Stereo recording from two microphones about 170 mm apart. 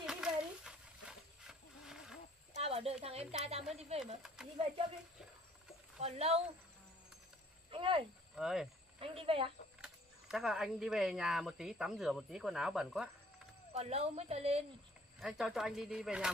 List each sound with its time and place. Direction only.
0.0 s a sound: 5° right (ahead or behind)
2.5 s a sound: 35° right (ahead or behind)
3.9 s a woman's voice: 40° right (ahead or behind)
4.4 s speech: 5° right (ahead or behind)
5.9 s a woman's voice: 40° right (ahead or behind)
7.7 s speech: 30° right (ahead or behind)
8.4 s speech: 5° right (ahead or behind)
9.0 s a woman's voice: 35° right (ahead or behind)
9.8 s speech: 5° right (ahead or behind)
13.7 s a woman's voice: 40° right (ahead or behind)
15.1 s speech: centre (ahead or behind)